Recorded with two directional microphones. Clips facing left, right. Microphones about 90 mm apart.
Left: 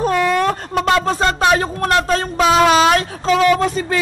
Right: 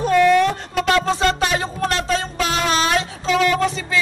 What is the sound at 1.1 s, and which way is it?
A man's voice, 45° left (ahead or behind).